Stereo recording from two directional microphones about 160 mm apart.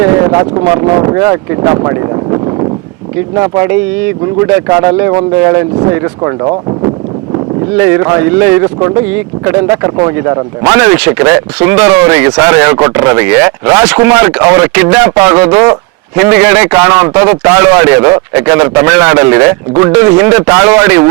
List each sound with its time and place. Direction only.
0.0 s speech: 20° right (ahead or behind)